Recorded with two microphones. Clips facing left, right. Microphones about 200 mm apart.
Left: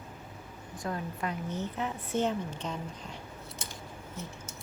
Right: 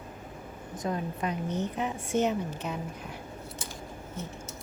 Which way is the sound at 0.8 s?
20° right (ahead or behind).